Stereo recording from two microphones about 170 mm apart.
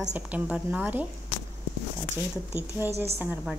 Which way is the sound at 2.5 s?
10° right (ahead or behind).